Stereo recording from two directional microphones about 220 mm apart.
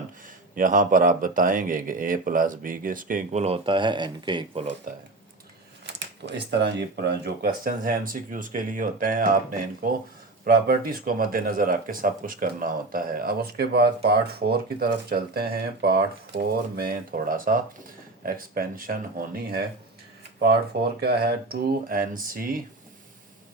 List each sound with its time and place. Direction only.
0.5 s speech: 40° right (ahead or behind)
6.2 s speech: 50° right (ahead or behind)
21.0 s speech: 45° right (ahead or behind)